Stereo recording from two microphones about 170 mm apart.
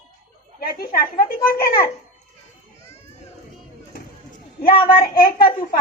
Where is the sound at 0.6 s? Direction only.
60° left (ahead or behind).